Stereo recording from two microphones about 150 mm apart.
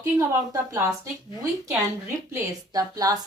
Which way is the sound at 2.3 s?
25° right (ahead or behind).